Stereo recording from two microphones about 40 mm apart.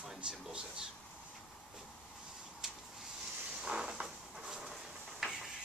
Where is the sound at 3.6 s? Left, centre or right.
Centre.